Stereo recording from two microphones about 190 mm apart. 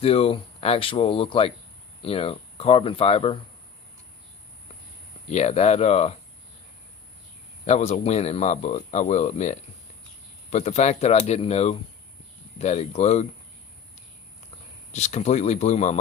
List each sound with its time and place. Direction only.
0.0 s speech: 30° left (ahead or behind)
5.3 s speech: 35° left (ahead or behind)
7.7 s speech: 35° left (ahead or behind)
14.9 s speech: 35° left (ahead or behind)